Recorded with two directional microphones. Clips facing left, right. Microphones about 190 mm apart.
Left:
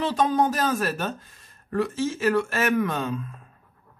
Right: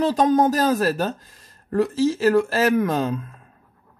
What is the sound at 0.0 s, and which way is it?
Speech, 40° right (ahead or behind).